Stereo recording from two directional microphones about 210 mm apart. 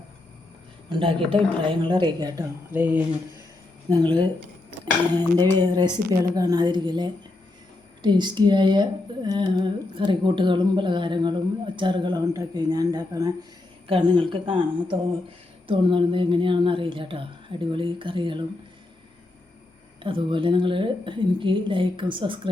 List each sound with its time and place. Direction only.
0.9 s speech: 25° right (ahead or behind)
2.7 s speech: 5° right (ahead or behind)
5.1 s speech: 20° right (ahead or behind)
20.0 s speech: 25° right (ahead or behind)